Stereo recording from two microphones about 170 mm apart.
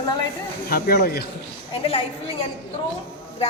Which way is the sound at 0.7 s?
65° left (ahead or behind).